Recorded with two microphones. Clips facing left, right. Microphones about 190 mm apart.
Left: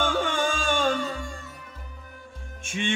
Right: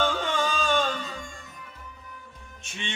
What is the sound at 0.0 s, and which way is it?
Music, 50° left (ahead or behind).